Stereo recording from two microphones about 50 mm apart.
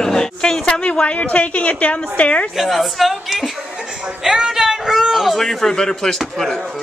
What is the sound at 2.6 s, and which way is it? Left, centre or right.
A man's voice, centre.